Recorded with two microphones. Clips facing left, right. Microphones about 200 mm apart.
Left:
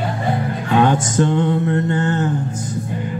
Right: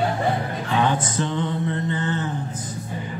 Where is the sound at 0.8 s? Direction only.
50° left (ahead or behind).